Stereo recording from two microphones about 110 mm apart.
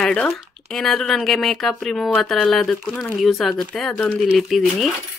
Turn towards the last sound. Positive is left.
turn(degrees=0)  # may be behind; listen again after turning